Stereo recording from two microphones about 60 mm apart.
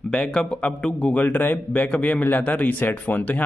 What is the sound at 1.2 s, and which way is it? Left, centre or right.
A man's voice, left.